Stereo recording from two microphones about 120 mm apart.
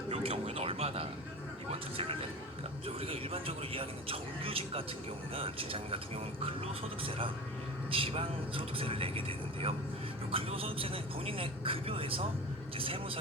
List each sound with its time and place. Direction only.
0.1 s music: 55° right (ahead or behind)
1.7 s speech: 50° right (ahead or behind)
7.9 s speech: 50° right (ahead or behind)